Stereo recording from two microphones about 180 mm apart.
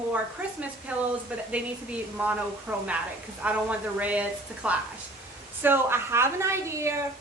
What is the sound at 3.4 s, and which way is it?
A woman's voice, 10° right (ahead or behind).